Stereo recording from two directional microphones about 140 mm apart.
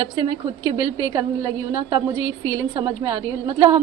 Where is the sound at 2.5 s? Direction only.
30° right (ahead or behind).